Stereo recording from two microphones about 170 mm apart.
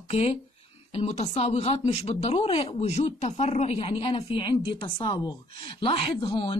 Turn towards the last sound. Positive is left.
turn(degrees=25)  # may be behind; listen again after turning